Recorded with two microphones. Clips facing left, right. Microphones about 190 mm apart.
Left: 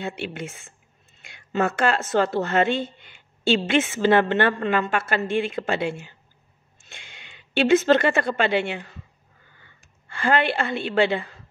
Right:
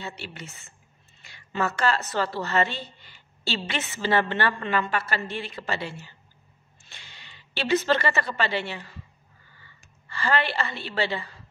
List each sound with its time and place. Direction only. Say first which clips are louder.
0.0 s a woman's voice: left 8 dB; 55° left (ahead or behind)